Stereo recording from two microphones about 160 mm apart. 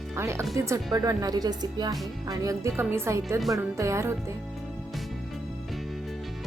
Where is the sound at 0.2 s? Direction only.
15° right (ahead or behind).